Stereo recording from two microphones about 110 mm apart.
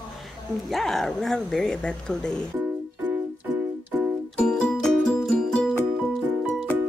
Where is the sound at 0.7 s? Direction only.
Centre (ahead or behind).